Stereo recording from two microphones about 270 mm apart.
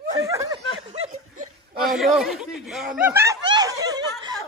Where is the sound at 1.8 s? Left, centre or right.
Centre.